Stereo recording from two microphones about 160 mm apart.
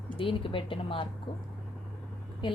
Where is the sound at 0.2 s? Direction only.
35° left (ahead or behind).